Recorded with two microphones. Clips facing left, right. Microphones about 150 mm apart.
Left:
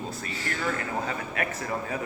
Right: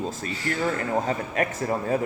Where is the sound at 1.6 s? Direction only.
35° right (ahead or behind).